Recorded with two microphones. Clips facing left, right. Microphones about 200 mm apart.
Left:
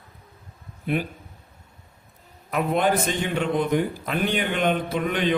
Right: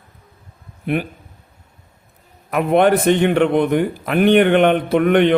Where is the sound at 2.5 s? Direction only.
65° right (ahead or behind).